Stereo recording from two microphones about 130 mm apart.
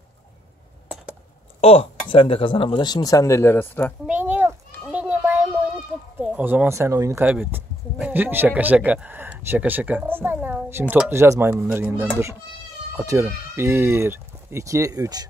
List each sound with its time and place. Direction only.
1.6 s speech: 50° left (ahead or behind); by 3.9 s 15° left (ahead or behind)
4.0 s children playing: 10° right (ahead or behind)
6.2 s speech: 10° right (ahead or behind)
7.2 s speech: 10° right (ahead or behind); by 15.2 s 30° right (ahead or behind)